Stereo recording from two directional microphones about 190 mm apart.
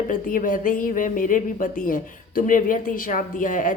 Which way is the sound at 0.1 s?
45° left (ahead or behind).